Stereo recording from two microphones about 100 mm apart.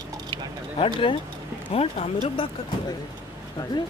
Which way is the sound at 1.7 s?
85° left.